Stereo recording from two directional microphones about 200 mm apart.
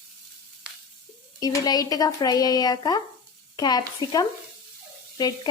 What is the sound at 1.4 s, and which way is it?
Speech, 20° left (ahead or behind).